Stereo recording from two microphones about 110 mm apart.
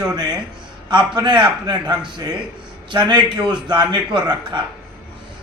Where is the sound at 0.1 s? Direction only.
40° right (ahead or behind).